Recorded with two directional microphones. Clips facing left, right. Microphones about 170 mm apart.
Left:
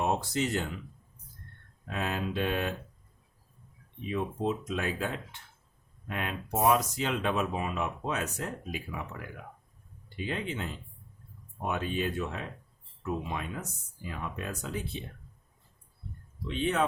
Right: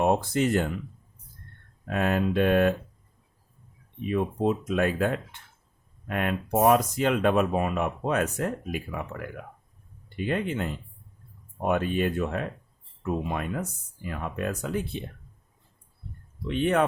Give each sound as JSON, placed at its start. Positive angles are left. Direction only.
{"t": 0.0, "sound": "speech", "side_deg": -50}
{"t": 1.9, "sound": "speech", "side_deg": -55}
{"t": 4.0, "sound": "speech", "side_deg": -55}
{"t": 16.5, "sound": "speech", "side_deg": -60}